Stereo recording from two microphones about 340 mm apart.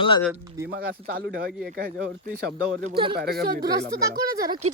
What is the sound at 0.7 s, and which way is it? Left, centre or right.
Speech, right.